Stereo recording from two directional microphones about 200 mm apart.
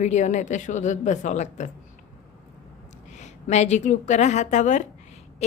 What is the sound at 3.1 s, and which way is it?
A woman's voice, 35° left (ahead or behind).